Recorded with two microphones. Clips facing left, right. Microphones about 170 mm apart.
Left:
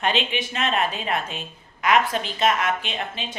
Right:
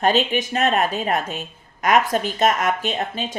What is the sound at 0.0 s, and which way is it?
A woman's voice, 40° right (ahead or behind).